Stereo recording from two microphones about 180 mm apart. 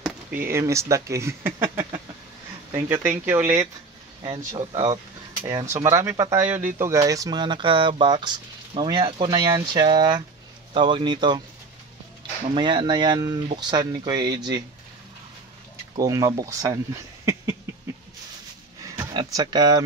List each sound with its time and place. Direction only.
0.3 s speech: 15° right (ahead or behind)
4.6 s speech: 30° right (ahead or behind)
5.7 s speech: 15° right (ahead or behind)
12.5 s speech: 25° right (ahead or behind)
16.0 s speech: 20° right (ahead or behind)
19.1 s speech: 20° right (ahead or behind)